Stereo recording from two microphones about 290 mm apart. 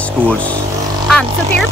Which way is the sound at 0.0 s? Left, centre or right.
Centre.